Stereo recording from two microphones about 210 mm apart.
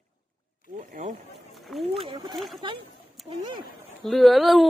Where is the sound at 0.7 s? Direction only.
40° right (ahead or behind).